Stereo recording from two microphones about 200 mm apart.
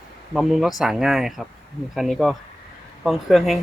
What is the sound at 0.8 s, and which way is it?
Speech, centre (ahead or behind).